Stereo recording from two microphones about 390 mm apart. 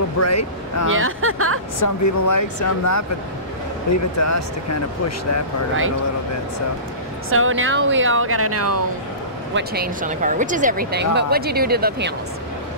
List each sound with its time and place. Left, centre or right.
0.2 s speech: left
0.9 s speech: right
1.8 s speech: left
4.2 s speech: left
7.2 s speech: right
9.5 s speech: right